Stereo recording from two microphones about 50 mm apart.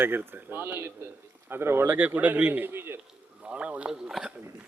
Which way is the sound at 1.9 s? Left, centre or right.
Right.